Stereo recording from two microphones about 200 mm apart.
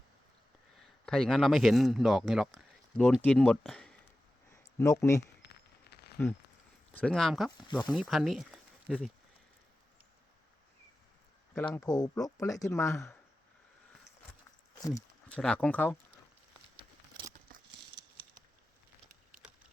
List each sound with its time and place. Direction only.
0.8 s a man's voice: 5° left (ahead or behind)
4.5 s a sound: 15° left (ahead or behind)
5.4 s a sound: 55° left (ahead or behind)
6.9 s speech: 5° left (ahead or behind)
11.5 s speech: 10° left (ahead or behind)
14.8 s speech: 15° left (ahead or behind)
15.3 s speech: 5° left (ahead or behind)